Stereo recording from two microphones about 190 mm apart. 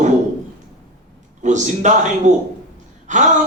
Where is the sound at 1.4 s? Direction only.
40° right (ahead or behind).